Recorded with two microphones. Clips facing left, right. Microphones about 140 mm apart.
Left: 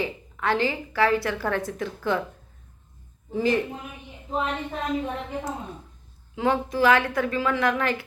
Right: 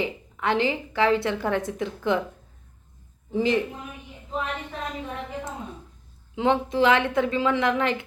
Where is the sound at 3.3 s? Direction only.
20° right (ahead or behind).